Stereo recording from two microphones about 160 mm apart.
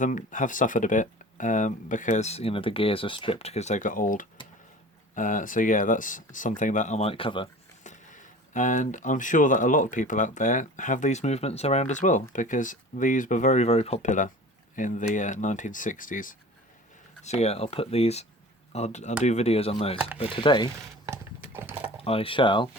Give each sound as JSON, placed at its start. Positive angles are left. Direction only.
{"t": 0.0, "sound": "speech", "side_deg": 50}
{"t": 7.9, "sound": "speech", "side_deg": 50}
{"t": 17.2, "sound": "speech", "side_deg": 40}
{"t": 21.1, "sound": "horse", "side_deg": -15}
{"t": 21.8, "sound": "speech", "side_deg": 35}